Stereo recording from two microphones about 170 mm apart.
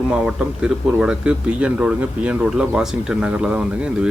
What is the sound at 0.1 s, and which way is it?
A man's voice, 5° right (ahead or behind).